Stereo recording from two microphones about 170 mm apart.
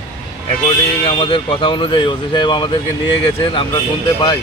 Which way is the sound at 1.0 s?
30° left (ahead or behind).